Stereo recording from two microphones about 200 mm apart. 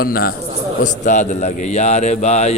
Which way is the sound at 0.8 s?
35° left (ahead or behind).